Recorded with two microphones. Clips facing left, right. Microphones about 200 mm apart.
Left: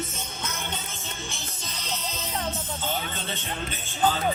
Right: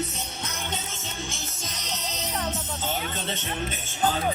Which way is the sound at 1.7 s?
40° right (ahead or behind).